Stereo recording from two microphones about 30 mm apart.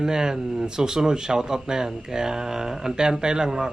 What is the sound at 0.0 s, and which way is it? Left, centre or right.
Speech, right.